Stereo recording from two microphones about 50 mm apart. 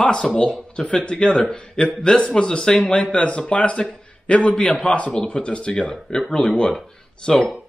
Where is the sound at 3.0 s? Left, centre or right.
Left.